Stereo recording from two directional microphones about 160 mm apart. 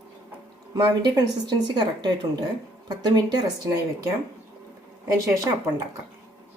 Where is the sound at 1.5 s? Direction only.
25° right (ahead or behind).